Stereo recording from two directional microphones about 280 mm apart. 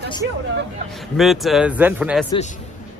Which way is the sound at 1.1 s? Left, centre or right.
Centre.